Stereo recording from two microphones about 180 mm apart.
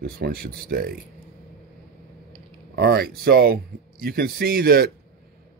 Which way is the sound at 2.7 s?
60° right (ahead or behind).